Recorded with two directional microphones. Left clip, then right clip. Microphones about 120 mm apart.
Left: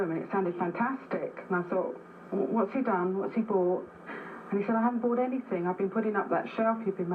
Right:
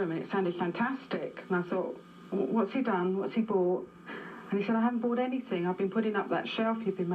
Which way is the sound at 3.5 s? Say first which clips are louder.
Left 1 dB; 10° right (ahead or behind).